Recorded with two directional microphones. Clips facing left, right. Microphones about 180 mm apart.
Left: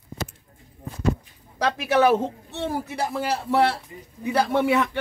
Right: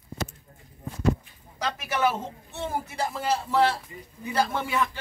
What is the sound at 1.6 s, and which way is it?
A man's voice, 75° left (ahead or behind).